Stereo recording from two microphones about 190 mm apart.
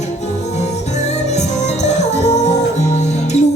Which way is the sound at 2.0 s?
35° left (ahead or behind).